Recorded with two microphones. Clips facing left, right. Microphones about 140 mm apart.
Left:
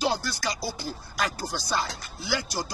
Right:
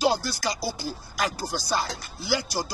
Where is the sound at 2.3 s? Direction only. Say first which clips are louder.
Right 3 dB; 5° right (ahead or behind).